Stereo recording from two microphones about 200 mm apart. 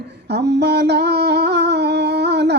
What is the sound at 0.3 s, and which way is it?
Humming, 55° right (ahead or behind).